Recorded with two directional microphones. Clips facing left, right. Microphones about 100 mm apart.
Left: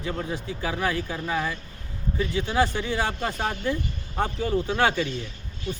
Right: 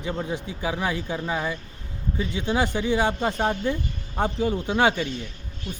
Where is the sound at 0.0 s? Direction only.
20° right (ahead or behind).